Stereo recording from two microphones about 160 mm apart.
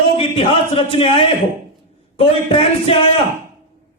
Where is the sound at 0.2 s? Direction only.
35° left (ahead or behind).